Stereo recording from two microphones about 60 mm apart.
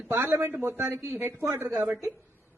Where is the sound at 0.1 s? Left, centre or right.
Right.